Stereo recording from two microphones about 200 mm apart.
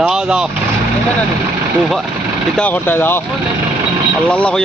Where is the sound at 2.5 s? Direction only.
10° left (ahead or behind).